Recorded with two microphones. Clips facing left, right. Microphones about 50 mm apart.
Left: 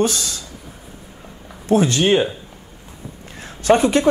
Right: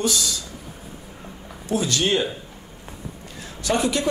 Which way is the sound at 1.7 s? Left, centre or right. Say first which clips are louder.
Left 7 dB; left.